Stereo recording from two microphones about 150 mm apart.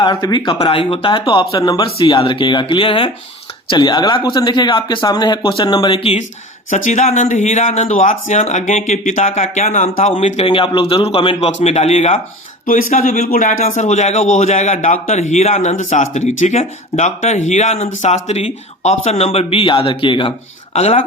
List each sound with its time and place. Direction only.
0.0 s speech: 30° left (ahead or behind)
6.7 s speech: 55° left (ahead or behind)
12.6 s speech: 70° left (ahead or behind); by 20.3 s 35° left (ahead or behind)
20.7 s speech: 45° left (ahead or behind)